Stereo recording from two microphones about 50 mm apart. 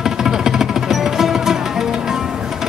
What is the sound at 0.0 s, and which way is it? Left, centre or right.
Music, centre.